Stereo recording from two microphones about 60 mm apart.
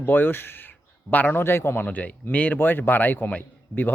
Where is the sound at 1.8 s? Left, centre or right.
Left.